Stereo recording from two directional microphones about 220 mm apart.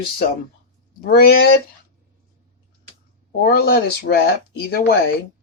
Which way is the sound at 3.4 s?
45° left (ahead or behind).